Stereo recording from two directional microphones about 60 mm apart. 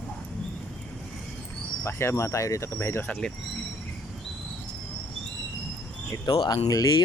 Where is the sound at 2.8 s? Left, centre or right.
Left.